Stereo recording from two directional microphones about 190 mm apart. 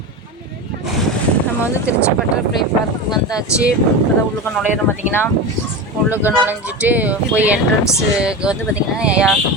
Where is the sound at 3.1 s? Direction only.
20° left (ahead or behind).